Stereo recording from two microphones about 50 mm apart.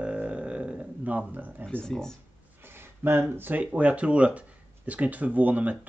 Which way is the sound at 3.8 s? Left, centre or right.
Right.